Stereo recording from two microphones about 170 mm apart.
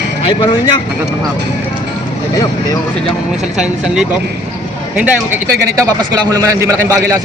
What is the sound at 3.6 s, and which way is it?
A man's voice, 5° right (ahead or behind).